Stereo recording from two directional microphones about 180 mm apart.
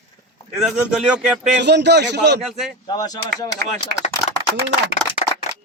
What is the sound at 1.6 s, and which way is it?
Speech, 70° right (ahead or behind).